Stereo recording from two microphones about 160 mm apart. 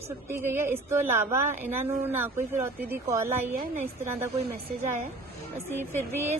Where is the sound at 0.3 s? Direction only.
15° right (ahead or behind).